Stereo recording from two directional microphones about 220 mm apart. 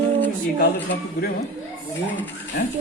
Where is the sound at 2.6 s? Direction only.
45° left (ahead or behind).